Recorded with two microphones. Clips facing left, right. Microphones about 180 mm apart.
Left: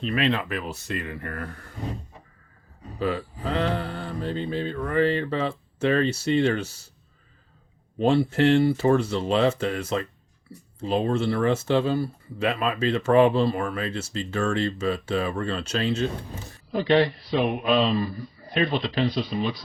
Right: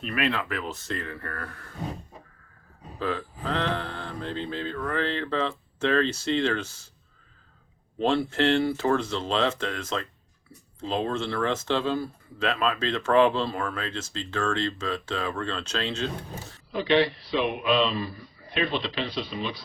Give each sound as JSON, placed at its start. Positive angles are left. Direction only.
{"t": 0.0, "sound": "speech", "side_deg": 25}
{"t": 3.0, "sound": "speech", "side_deg": 10}
{"t": 8.1, "sound": "speech", "side_deg": 10}
{"t": 16.7, "sound": "a man's voice", "side_deg": 45}